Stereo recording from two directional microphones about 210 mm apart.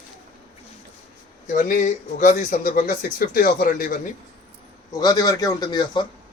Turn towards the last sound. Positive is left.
turn(degrees=20)  # may be behind; listen again after turning